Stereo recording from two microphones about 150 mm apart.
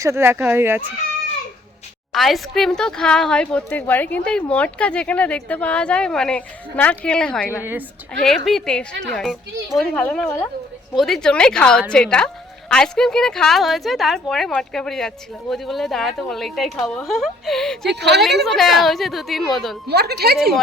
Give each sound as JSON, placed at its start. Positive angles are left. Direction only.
{"t": 0.0, "sound": "speech", "side_deg": -15}
{"t": 2.1, "sound": "a woman's voice", "side_deg": 0}
{"t": 7.6, "sound": "speech", "side_deg": -15}
{"t": 8.2, "sound": "a woman's voice", "side_deg": 0}
{"t": 19.9, "sound": "a woman's voice", "side_deg": -90}